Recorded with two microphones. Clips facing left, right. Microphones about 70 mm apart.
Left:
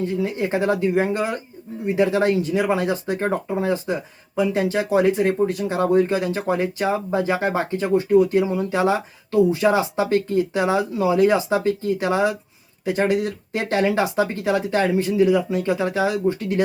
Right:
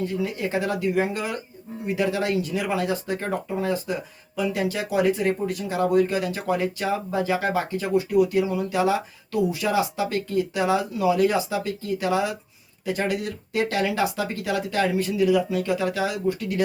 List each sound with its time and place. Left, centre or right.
0.0 s speech: left